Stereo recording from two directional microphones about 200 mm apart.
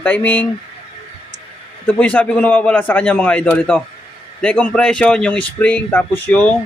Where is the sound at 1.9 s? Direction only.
5° left (ahead or behind).